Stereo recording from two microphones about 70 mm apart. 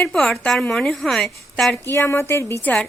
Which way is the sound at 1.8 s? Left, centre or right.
Left.